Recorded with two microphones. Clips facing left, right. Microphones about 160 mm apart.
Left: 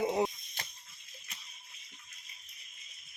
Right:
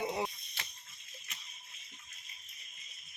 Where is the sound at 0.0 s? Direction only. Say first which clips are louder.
Left 5 dB; 40° left (ahead or behind).